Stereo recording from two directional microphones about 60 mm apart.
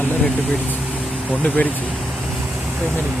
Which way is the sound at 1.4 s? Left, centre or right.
Left.